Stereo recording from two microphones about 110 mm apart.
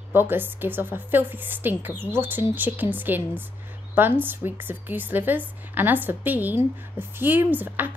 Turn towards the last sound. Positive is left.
turn(degrees=-15)  # may be behind; listen again after turning